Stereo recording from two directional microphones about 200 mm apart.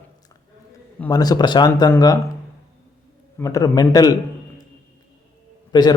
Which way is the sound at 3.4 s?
15° left (ahead or behind).